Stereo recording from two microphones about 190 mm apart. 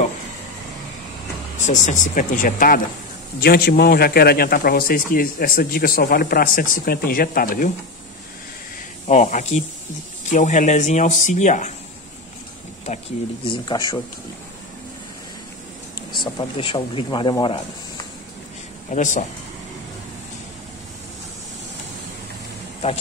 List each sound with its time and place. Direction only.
1.7 s a man's voice: 40° left (ahead or behind)
9.0 s speech: 40° left (ahead or behind)
13.5 s speech: 20° left (ahead or behind)
16.1 s speech: 25° left (ahead or behind)
18.9 s speech: 40° left (ahead or behind)